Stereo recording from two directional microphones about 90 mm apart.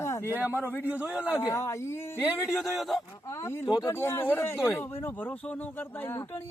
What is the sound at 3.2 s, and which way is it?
Speech, 35° left (ahead or behind).